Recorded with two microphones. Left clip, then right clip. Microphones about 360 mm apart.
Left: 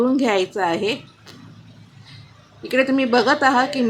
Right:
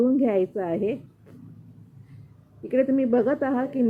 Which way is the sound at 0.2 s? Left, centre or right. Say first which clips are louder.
Left 4 dB; centre.